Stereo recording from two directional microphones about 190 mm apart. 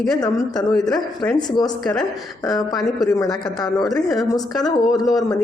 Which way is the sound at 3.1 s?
20° left (ahead or behind).